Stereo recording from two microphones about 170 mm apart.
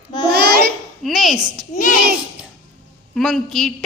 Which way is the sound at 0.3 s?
70° right (ahead or behind).